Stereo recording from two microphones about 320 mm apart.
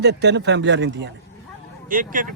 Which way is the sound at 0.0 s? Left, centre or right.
Right.